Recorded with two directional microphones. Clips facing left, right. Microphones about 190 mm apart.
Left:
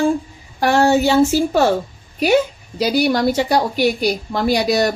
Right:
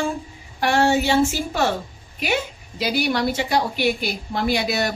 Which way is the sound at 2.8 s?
40° left (ahead or behind).